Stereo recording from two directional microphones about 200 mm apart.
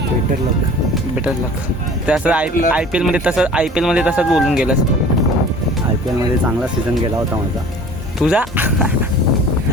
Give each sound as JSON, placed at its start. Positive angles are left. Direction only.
{"t": 2.0, "sound": "speech", "side_deg": -5}
{"t": 8.2, "sound": "speech", "side_deg": -5}